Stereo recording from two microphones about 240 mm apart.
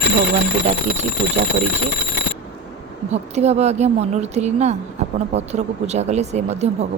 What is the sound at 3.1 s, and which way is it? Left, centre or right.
Speech, right.